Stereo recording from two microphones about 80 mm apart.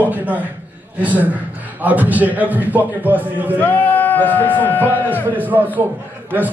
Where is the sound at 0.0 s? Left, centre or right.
Right.